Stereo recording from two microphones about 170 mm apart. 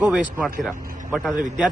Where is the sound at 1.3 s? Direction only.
50° right (ahead or behind).